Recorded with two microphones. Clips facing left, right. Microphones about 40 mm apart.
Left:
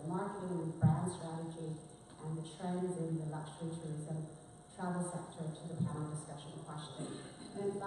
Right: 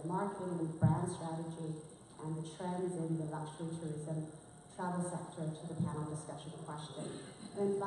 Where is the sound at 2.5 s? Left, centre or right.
Centre.